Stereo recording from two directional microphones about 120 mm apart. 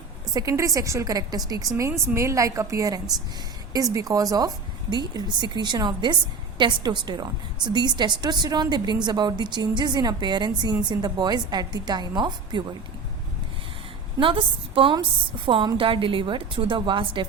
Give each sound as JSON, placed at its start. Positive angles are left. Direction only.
{"t": 0.3, "sound": "a woman's voice", "side_deg": -25}
{"t": 14.2, "sound": "a woman's voice", "side_deg": -45}